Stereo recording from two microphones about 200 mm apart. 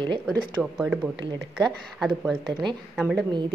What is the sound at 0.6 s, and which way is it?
Speech, centre (ahead or behind).